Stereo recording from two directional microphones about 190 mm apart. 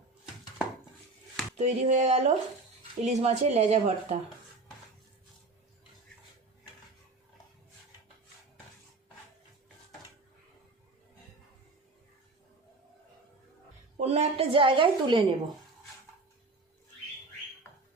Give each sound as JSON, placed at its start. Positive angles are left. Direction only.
{"t": 1.5, "sound": "speech", "side_deg": -35}
{"t": 13.9, "sound": "a woman's voice", "side_deg": -35}